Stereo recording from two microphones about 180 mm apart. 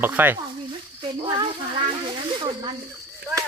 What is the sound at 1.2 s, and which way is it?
Child singing, 25° right (ahead or behind).